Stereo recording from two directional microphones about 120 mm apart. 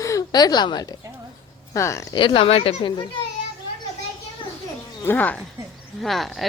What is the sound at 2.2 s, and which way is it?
Speech, 45° left (ahead or behind).